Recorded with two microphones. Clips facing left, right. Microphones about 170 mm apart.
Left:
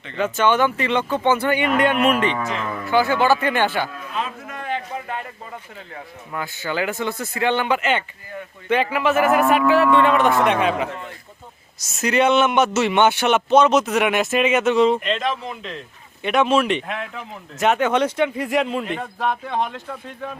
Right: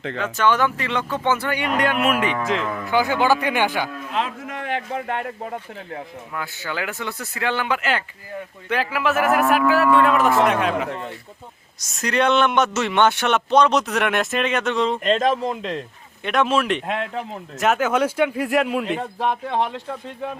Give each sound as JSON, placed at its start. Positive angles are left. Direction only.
{"t": 0.2, "sound": "speech", "side_deg": 0}
{"t": 4.1, "sound": "a sound", "side_deg": -90}
{"t": 5.2, "sound": "speech", "side_deg": -60}
{"t": 6.3, "sound": "speech", "side_deg": 0}
{"t": 15.0, "sound": "a man's voice", "side_deg": -40}
{"t": 16.2, "sound": "speech", "side_deg": 0}
{"t": 16.8, "sound": "a man's voice", "side_deg": -40}
{"t": 17.6, "sound": "speech", "side_deg": -5}
{"t": 19.2, "sound": "speech", "side_deg": -25}